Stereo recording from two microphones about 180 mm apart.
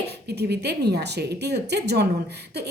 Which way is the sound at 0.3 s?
65° right (ahead or behind).